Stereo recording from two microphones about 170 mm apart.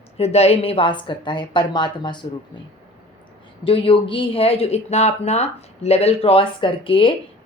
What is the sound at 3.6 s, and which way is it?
Speech, 30° left (ahead or behind).